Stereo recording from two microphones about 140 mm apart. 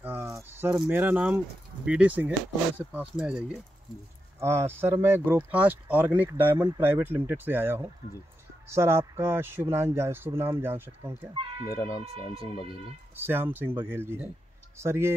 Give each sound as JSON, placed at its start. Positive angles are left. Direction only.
{"t": 0.0, "sound": "keys jangling", "side_deg": -15}
{"t": 1.9, "sound": "speech", "side_deg": -10}
{"t": 4.4, "sound": "speech", "side_deg": -20}
{"t": 11.7, "sound": "speech", "side_deg": 25}
{"t": 13.1, "sound": "speech", "side_deg": -15}